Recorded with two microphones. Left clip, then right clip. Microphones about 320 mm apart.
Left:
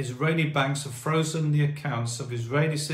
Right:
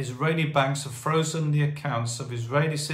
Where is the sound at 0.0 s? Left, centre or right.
Centre.